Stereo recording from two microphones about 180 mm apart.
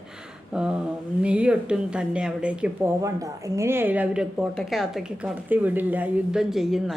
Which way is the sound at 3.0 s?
15° right (ahead or behind).